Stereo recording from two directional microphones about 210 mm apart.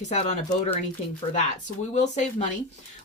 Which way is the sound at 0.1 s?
35° left (ahead or behind).